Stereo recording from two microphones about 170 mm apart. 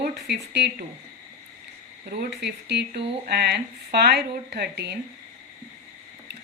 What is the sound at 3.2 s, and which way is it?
Speech, 75° right (ahead or behind).